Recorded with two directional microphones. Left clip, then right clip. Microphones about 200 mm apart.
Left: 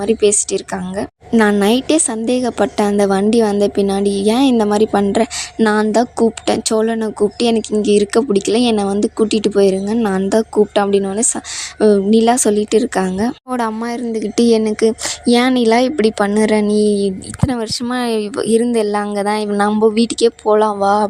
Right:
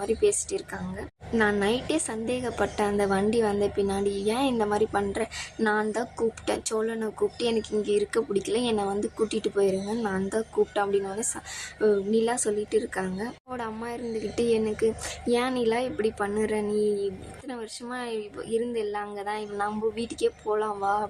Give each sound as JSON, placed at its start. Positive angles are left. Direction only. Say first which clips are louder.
{"t": 0.0, "sound": "a woman's voice", "louder": "left 11 dB", "side_deg": 45}